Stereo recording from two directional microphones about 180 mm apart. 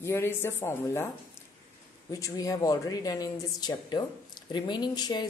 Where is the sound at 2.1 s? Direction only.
20° left (ahead or behind).